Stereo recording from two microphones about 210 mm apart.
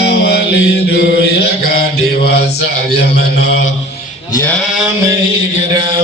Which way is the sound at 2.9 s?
50° left (ahead or behind).